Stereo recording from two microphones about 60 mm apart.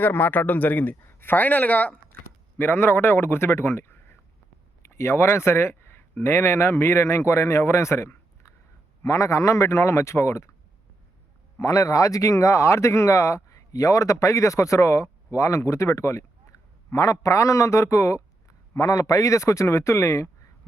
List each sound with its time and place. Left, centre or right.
0.0 s speech: left
2.6 s speech: left
9.0 s speech: left
11.6 s a man's voice: left
18.8 s speech: left